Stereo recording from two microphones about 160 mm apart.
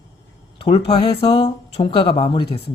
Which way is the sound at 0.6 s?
35° left (ahead or behind).